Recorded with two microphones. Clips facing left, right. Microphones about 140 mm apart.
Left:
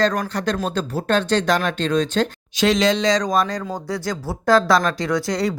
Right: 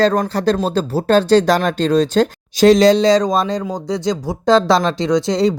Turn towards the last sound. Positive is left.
turn(degrees=-25)  # may be behind; listen again after turning